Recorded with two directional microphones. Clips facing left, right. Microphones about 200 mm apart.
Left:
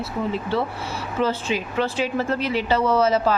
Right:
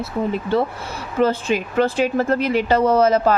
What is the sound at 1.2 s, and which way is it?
Speech, 50° right (ahead or behind).